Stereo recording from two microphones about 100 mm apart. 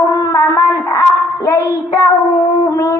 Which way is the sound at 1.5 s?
30° left (ahead or behind).